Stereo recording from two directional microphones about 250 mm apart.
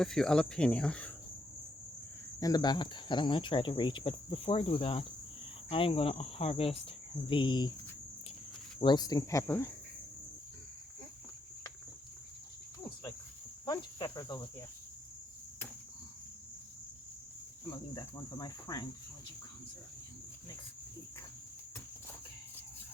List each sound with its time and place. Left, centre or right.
0.0 s speech: centre
2.4 s speech: centre
8.8 s cricket: centre
12.8 s cricket: centre
13.7 s insect: centre
17.9 s cricket: centre